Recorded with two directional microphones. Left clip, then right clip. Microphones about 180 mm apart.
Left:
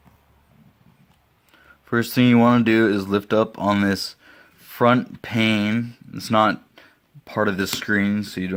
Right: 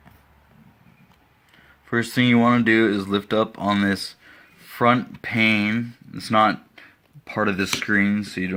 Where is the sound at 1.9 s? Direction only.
60° left (ahead or behind).